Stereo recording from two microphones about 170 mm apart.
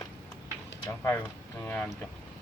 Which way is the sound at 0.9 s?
15° left (ahead or behind).